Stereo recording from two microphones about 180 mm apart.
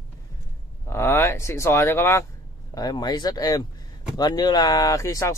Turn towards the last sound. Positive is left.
turn(degrees=15)  # may be behind; listen again after turning